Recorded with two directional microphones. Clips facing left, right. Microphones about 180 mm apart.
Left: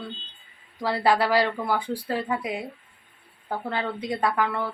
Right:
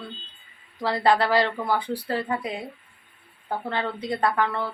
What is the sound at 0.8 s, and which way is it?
Speech, 10° left (ahead or behind).